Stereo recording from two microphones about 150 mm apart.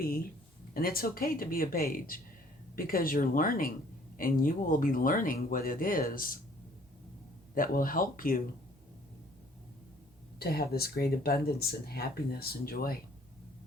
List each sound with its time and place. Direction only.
0.0 s speech: 80° left
7.5 s speech: 70° left (ahead or behind)
10.4 s speech: 90° left